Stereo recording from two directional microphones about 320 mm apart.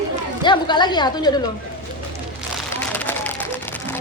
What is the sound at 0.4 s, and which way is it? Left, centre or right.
Speech, centre.